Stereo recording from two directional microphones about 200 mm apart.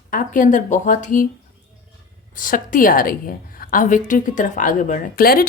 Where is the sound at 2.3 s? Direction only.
40° left (ahead or behind).